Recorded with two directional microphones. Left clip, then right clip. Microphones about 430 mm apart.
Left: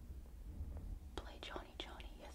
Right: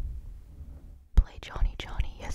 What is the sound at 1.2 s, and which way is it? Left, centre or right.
Whispering, right.